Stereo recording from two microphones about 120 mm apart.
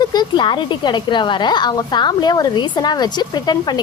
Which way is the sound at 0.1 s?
35° left (ahead or behind).